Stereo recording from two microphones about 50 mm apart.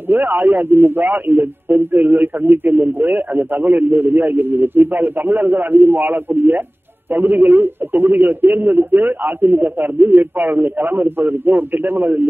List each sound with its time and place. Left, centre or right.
0.1 s a man's voice: right